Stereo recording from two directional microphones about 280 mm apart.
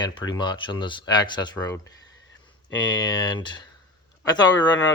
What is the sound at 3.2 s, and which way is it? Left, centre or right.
Speech, centre.